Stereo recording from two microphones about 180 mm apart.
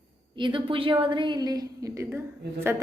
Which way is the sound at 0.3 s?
25° right (ahead or behind).